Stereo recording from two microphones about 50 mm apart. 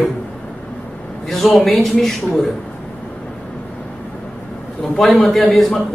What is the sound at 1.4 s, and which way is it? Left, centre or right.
A man's voice, centre.